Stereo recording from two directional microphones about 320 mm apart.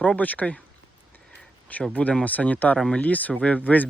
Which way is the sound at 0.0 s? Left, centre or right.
Centre.